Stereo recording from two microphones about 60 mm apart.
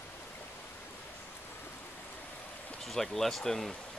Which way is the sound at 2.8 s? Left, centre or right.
Centre.